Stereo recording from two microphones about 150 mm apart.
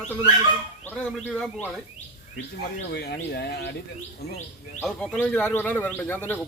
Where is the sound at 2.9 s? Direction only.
90° left.